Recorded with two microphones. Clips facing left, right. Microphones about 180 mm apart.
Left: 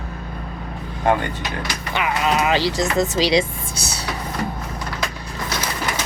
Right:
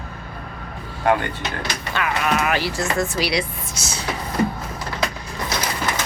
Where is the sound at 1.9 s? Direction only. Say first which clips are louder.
Left 2 dB; 20° left (ahead or behind).